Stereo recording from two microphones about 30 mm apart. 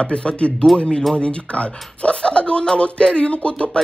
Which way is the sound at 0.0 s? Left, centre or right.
Left.